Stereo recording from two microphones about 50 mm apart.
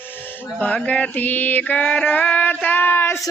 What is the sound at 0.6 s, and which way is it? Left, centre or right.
Mantra, left.